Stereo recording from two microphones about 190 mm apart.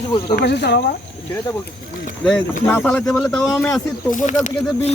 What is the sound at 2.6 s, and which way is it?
Speech, 5° left (ahead or behind).